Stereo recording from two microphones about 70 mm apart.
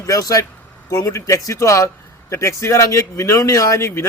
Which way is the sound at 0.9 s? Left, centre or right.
Left.